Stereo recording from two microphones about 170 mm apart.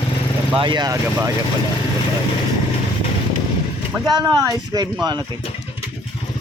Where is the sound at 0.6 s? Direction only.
25° right (ahead or behind).